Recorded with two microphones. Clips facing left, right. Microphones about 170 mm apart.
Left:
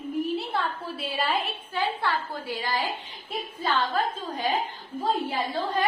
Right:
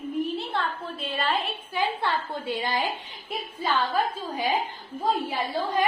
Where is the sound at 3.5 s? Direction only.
10° right (ahead or behind).